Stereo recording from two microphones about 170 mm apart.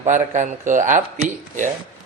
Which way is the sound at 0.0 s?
45° right (ahead or behind).